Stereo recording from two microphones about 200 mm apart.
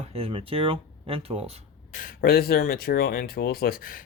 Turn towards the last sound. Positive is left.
turn(degrees=45)  # may be behind; listen again after turning